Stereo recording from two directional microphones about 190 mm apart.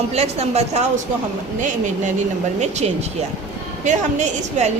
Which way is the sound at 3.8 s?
40° right (ahead or behind).